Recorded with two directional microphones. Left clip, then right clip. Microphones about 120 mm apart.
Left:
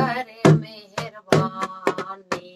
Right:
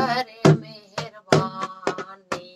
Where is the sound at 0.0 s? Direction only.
35° left (ahead or behind).